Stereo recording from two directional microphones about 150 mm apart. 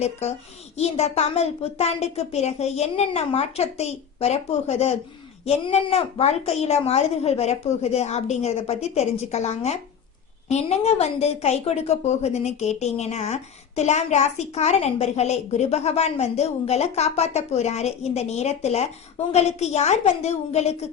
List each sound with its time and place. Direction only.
0.0 s a woman's voice: 45° left (ahead or behind)